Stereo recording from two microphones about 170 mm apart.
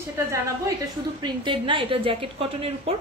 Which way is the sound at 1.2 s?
30° right (ahead or behind).